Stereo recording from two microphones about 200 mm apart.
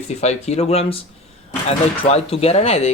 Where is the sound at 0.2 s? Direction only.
35° left (ahead or behind).